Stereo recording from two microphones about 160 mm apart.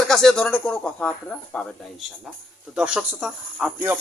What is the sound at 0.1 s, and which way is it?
Speech, 5° left (ahead or behind).